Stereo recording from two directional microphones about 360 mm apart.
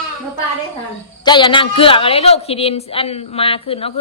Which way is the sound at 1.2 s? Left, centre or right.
Centre.